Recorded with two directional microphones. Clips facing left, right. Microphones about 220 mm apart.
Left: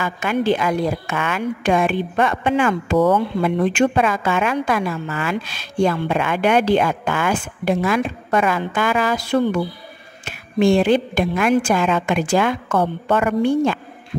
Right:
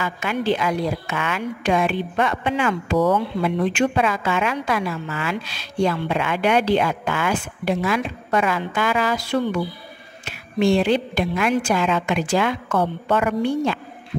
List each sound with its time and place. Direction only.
0.0 s a woman's voice: 50° left (ahead or behind)